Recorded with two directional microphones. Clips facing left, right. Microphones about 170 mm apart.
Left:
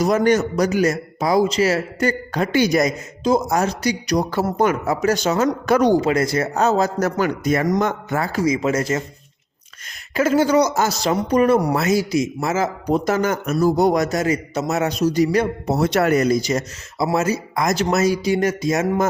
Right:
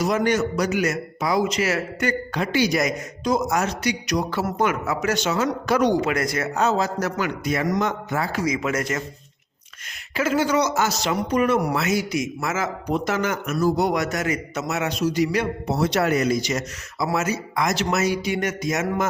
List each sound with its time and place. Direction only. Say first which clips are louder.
0.0 s speech: left 4 dB; 45° left (ahead or behind)
2.8 s speech: left 4 dB; 30° left (ahead or behind); by 5.8 s 45° left (ahead or behind)
5.8 s speech: left 4 dB; 35° left (ahead or behind); by 8.4 s 50° left (ahead or behind)
8.4 s speech: left 7 dB; 30° left (ahead or behind)
10.2 s speech: left 5 dB; 40° left (ahead or behind)